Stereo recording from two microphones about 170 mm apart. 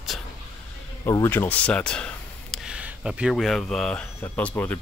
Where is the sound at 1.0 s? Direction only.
15° left (ahead or behind).